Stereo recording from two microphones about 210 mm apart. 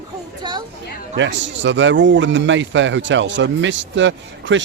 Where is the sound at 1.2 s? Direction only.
60° right (ahead or behind).